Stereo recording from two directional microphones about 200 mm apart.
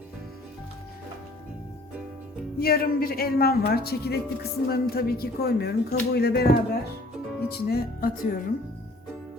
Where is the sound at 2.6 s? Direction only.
50° left (ahead or behind).